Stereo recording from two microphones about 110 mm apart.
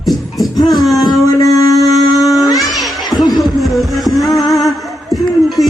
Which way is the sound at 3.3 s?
Centre (ahead or behind).